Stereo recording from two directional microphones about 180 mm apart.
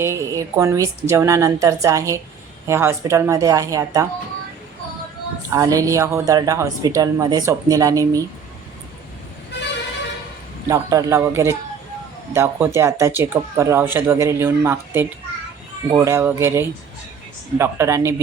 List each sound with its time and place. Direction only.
0.0 s speech: 15° right (ahead or behind)
5.5 s a woman's voice: 20° right (ahead or behind)
10.7 s speech: 20° right (ahead or behind)